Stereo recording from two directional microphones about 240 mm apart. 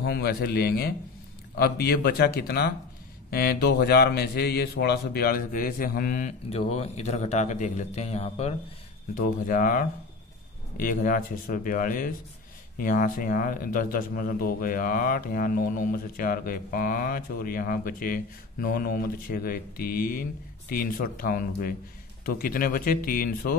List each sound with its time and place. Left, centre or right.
0.0 s a man's voice: left